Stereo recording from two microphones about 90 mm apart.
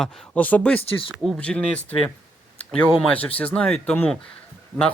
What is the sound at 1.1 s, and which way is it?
Speech, centre (ahead or behind).